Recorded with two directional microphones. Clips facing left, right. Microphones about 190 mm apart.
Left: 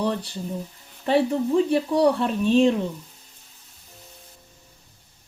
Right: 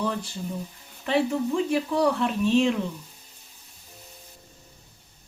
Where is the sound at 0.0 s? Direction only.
30° left (ahead or behind).